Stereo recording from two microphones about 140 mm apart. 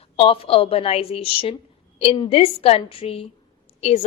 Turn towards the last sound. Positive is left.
turn(degrees=50)  # may be behind; listen again after turning